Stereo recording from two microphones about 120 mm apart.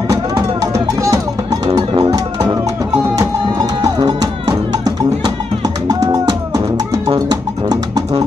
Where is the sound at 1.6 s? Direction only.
40° right (ahead or behind).